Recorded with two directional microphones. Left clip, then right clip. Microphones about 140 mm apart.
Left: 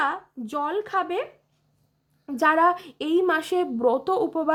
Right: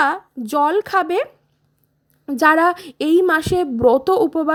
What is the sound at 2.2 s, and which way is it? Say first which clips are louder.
A woman's voice: right 5 dB; 25° right (ahead or behind).